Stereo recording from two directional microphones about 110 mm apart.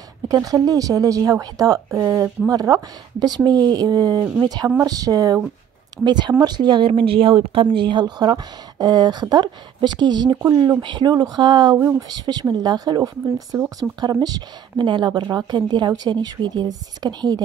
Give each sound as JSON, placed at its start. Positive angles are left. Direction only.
{"t": 0.3, "sound": "a woman's voice", "side_deg": -35}
{"t": 6.9, "sound": "a woman's voice", "side_deg": -55}